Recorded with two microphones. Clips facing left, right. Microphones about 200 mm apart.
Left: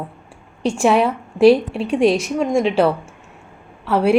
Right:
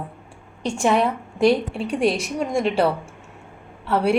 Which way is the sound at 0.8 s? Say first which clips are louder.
Left 3 dB; 90° left.